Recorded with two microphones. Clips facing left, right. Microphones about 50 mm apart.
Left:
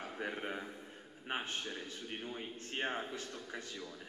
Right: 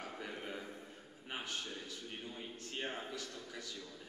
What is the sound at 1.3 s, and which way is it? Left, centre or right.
A man's voice, left.